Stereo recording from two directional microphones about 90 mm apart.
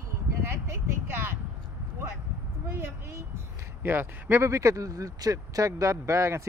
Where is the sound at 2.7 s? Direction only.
25° right (ahead or behind).